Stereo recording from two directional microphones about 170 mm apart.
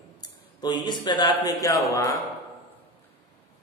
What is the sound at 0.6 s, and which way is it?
A man's voice, 25° left (ahead or behind).